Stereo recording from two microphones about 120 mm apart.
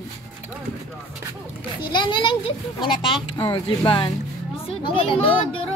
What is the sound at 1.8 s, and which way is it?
A child's voice, 40° left (ahead or behind).